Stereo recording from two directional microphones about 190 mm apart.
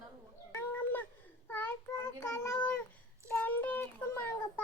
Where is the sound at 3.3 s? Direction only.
10° left (ahead or behind).